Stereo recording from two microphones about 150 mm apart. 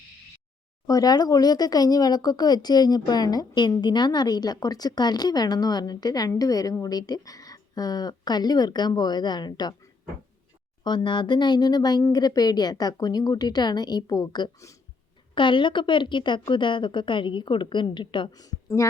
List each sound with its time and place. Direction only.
0.9 s speech: 25° left (ahead or behind)
10.8 s a woman's voice: 30° left (ahead or behind)